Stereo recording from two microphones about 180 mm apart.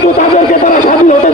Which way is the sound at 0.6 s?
45° left (ahead or behind).